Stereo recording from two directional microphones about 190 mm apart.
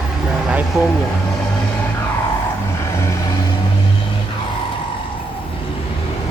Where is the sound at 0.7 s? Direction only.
15° right (ahead or behind).